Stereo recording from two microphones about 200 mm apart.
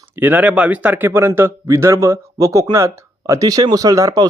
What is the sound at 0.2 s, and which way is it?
A man's voice, 10° right (ahead or behind).